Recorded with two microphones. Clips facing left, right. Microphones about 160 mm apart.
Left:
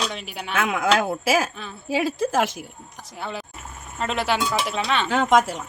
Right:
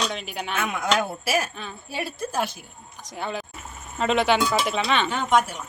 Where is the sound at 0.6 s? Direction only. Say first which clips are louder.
Left 4 dB; 90° left.